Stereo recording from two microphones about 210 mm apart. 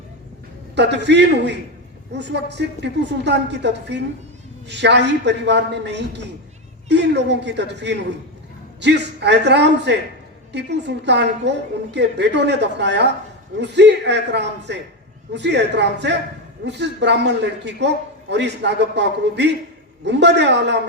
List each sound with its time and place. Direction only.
0.8 s a man's voice: 55° right (ahead or behind)